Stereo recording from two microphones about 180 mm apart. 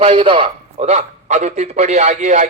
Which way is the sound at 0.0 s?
30° right (ahead or behind).